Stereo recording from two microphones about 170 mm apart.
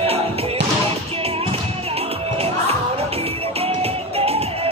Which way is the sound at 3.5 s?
35° right (ahead or behind).